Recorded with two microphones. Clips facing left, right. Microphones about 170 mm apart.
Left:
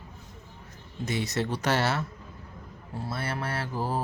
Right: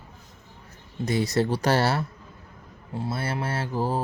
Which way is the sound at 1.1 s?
35° right (ahead or behind).